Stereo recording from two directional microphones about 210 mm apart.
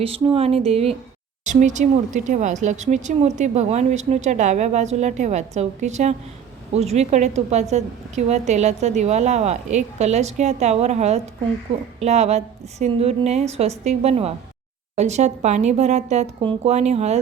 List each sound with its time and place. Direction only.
0.0 s speech: 25° right (ahead or behind)